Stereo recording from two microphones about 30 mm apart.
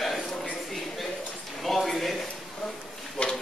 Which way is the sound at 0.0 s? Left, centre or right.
Centre.